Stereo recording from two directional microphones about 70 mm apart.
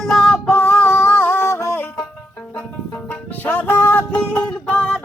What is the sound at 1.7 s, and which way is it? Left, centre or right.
Music, left.